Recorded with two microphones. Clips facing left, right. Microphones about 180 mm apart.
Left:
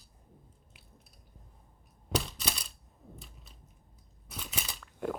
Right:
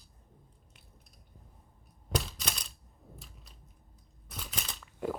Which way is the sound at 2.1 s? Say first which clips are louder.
Left 1 dB; centre (ahead or behind).